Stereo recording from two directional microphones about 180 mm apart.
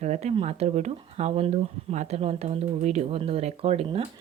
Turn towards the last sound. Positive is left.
turn(degrees=-35)  # may be behind; listen again after turning